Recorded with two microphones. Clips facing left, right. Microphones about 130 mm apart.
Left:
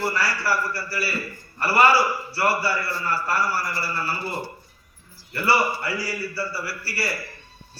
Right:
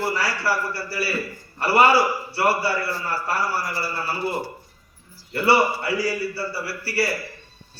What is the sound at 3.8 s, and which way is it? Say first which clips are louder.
Speech: right 1 dB; 25° right (ahead or behind).